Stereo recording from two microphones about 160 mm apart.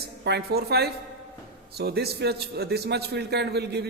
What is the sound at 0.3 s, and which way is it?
A man's voice, 90° right.